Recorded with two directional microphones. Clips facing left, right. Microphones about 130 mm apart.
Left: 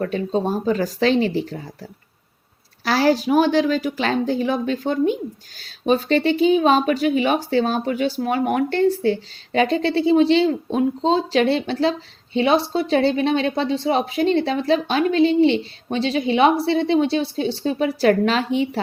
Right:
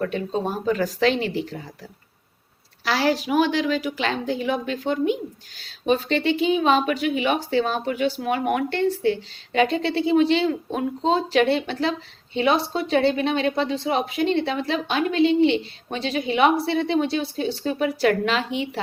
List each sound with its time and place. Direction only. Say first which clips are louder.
0.0 s a woman's voice: left 3 dB; 35° left (ahead or behind)
2.8 s a woman's voice: left 4 dB; 40° left (ahead or behind)